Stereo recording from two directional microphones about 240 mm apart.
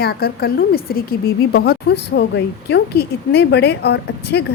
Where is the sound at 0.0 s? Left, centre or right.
Left.